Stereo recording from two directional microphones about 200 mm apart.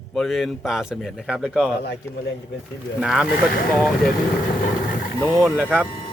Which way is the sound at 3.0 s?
5° right (ahead or behind).